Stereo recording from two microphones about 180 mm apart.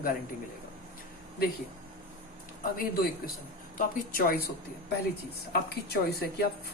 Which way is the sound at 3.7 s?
55° left (ahead or behind).